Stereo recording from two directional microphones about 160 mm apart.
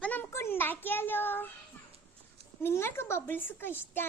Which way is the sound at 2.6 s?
15° left (ahead or behind).